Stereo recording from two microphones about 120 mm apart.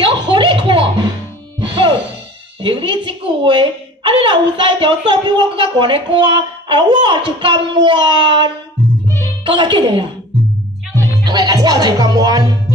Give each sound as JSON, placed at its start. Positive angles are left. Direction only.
{"t": 0.0, "sound": "a sound", "side_deg": -40}
{"t": 1.6, "sound": "music", "side_deg": -45}
{"t": 2.6, "sound": "a woman's voice", "side_deg": -45}
{"t": 11.2, "sound": "a woman's voice", "side_deg": -35}